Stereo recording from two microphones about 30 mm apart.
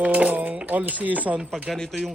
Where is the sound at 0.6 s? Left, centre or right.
Right.